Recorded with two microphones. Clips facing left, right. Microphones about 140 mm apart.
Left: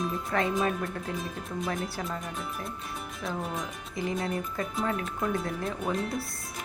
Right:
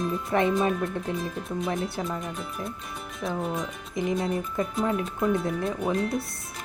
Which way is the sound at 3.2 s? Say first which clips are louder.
Right 5 dB; centre (ahead or behind).